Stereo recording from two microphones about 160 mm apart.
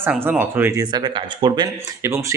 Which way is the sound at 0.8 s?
25° right (ahead or behind).